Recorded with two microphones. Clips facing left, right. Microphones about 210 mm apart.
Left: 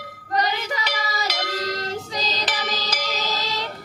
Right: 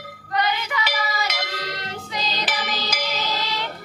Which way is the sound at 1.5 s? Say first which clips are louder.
Left 5 dB; 40° left (ahead or behind).